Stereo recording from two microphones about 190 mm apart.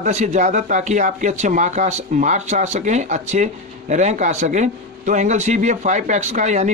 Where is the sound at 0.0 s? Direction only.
40° right (ahead or behind).